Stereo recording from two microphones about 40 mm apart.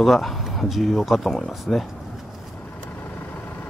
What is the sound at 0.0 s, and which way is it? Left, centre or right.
Speech, centre.